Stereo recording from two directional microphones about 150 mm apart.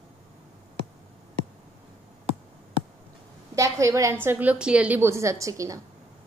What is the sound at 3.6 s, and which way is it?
A woman's voice, 20° right (ahead or behind).